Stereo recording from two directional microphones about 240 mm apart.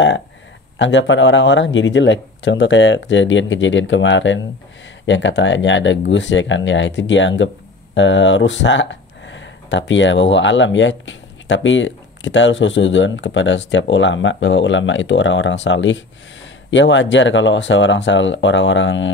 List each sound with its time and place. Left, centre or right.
0.7 s speech: left